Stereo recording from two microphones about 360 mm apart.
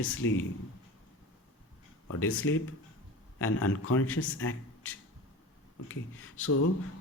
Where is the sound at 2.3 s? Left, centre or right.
Left.